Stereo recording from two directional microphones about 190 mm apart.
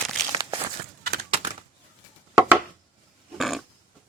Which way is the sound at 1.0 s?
55° right (ahead or behind).